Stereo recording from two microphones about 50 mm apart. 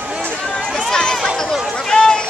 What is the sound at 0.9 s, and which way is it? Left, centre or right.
Run, centre.